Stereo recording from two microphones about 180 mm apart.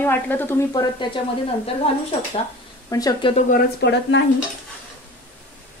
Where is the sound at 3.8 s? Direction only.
75° left (ahead or behind).